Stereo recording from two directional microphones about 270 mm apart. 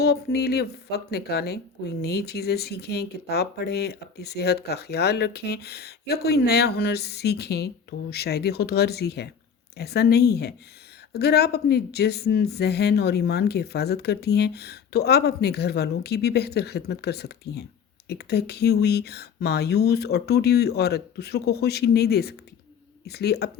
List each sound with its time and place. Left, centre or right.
0.0 s speech: left